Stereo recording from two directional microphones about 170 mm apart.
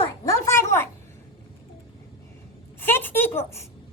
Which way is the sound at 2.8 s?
10° left (ahead or behind).